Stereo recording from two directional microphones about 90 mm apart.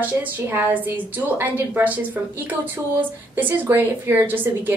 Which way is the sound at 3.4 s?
20° right (ahead or behind).